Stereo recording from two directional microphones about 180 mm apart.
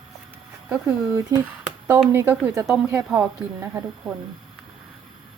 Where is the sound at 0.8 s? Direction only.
20° right (ahead or behind).